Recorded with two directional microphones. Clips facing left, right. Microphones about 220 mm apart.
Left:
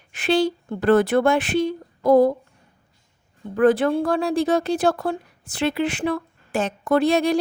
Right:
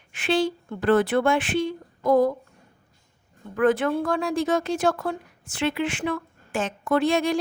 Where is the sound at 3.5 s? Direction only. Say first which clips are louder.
Left 4 dB; 35° left (ahead or behind).